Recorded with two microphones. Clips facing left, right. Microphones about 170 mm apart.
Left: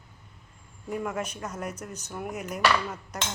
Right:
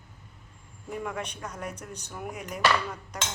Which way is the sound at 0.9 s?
5° left (ahead or behind).